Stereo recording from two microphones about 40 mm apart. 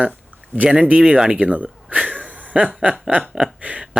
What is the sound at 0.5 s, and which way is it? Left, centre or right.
Speech, right.